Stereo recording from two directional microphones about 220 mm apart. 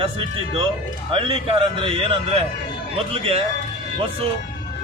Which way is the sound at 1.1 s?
25° right (ahead or behind).